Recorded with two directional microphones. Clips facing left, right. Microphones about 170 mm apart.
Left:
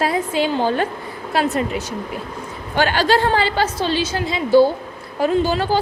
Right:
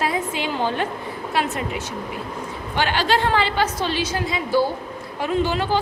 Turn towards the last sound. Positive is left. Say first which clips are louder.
# left 3 dB
turn(degrees=35)  # may be behind; listen again after turning